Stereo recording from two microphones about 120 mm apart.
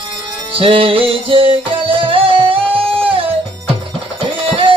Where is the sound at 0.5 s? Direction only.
50° right (ahead or behind).